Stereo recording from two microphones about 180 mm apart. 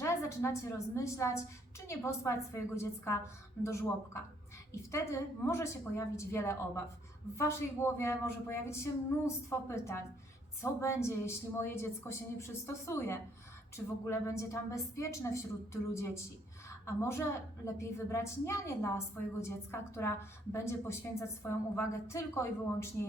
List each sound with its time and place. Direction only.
0.0 s a woman's voice: 15° left (ahead or behind)